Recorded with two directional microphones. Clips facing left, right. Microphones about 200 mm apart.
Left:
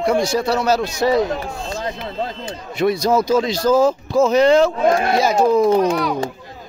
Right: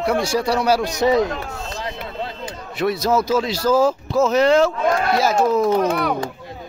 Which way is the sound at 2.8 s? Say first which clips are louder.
Left 2 dB; 5° right (ahead or behind).